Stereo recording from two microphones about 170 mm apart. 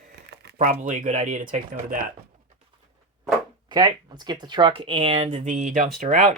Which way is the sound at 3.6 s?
25° right (ahead or behind).